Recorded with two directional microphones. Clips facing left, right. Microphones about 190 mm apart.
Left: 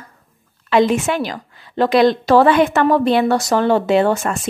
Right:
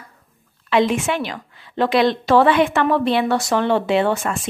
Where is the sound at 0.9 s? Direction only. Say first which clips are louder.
Left 3 dB; 40° left (ahead or behind).